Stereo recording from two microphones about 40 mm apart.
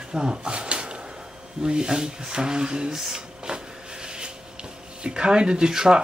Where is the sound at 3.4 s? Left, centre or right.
Right.